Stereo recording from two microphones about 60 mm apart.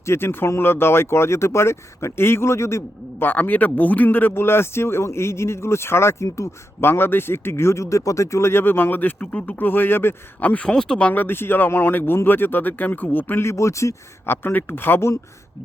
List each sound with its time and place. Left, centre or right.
0.0 s speech: left
3.2 s speech: left
6.2 s speech: left
6.8 s speech: left
9.6 s speech: left
10.4 s speech: left
11.1 s speech: left
13.5 s speech: left
14.3 s speech: left